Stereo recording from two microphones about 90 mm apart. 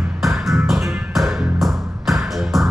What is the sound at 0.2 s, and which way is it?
Music, centre (ahead or behind).